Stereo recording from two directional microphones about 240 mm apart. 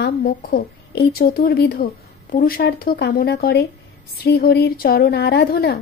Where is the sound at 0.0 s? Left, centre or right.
Left.